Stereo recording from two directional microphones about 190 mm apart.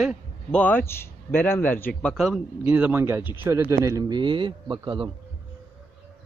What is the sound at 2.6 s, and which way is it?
A man's voice, 10° right (ahead or behind).